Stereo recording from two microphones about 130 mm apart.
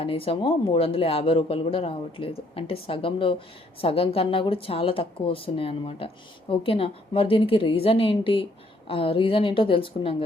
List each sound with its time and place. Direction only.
0.0 s speech: 45° left (ahead or behind)